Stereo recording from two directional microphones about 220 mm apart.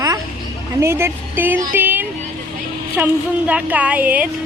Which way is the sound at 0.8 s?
10° right (ahead or behind).